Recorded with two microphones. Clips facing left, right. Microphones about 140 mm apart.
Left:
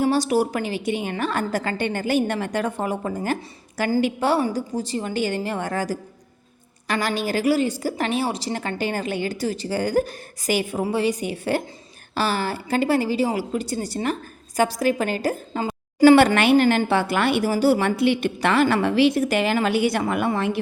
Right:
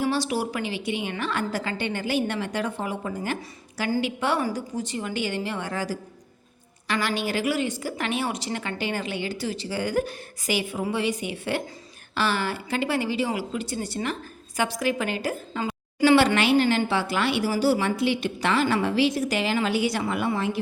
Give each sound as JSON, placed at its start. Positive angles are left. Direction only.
{"t": 0.0, "sound": "a woman's voice", "side_deg": 45}